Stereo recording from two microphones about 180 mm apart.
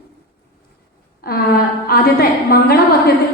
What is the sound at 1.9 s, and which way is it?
A woman's voice, 55° left (ahead or behind).